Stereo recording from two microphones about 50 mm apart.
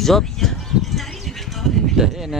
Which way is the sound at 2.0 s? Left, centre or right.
Centre.